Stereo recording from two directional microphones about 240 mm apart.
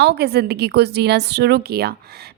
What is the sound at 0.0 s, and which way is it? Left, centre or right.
A woman's voice, right.